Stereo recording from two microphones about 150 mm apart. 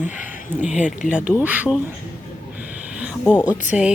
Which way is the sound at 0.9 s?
60° left (ahead or behind).